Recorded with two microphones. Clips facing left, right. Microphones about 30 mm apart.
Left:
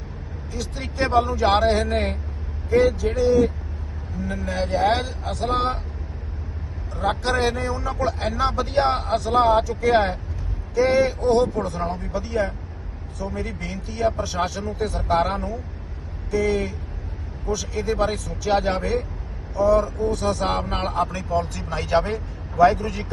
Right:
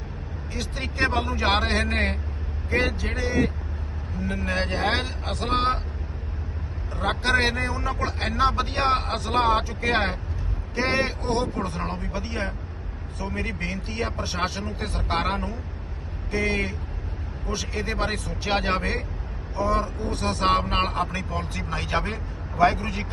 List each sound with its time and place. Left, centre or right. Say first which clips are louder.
0.5 s speech: left 1 dB; right
6.9 s speech: even; right
22.5 s speech: left 4 dB; right